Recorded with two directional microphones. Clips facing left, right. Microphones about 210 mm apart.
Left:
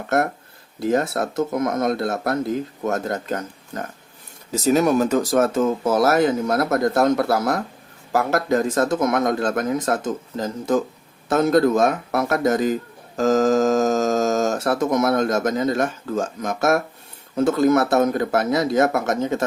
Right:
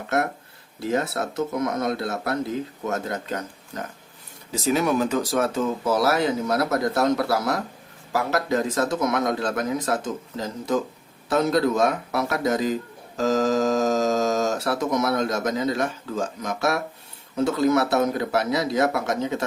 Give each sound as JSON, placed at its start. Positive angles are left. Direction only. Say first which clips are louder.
{"t": 0.8, "sound": "speech", "louder": "left 4 dB", "side_deg": 50}
{"t": 4.5, "sound": "speech", "louder": "left 4 dB", "side_deg": 45}